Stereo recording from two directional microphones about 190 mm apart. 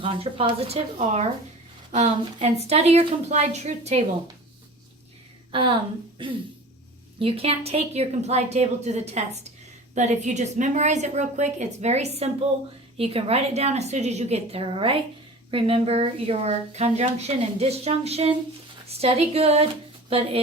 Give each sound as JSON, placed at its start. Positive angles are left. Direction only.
{"t": 0.0, "sound": "speech", "side_deg": -30}
{"t": 5.5, "sound": "speech", "side_deg": -25}